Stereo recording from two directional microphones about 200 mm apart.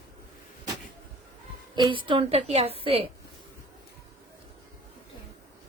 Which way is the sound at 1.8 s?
25° right (ahead or behind).